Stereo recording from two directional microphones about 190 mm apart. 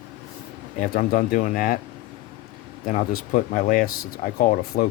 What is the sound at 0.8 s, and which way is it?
Speech, 45° left (ahead or behind).